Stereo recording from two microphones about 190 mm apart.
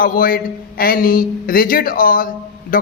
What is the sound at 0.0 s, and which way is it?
A man's voice, 50° left (ahead or behind).